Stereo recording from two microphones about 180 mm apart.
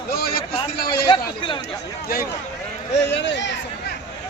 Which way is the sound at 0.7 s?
60° left (ahead or behind).